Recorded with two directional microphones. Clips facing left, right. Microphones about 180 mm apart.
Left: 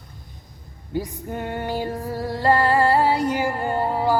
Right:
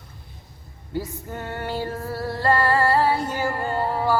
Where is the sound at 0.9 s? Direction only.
15° left (ahead or behind).